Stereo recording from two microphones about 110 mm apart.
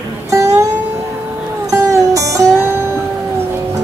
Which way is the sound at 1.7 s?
30° right (ahead or behind).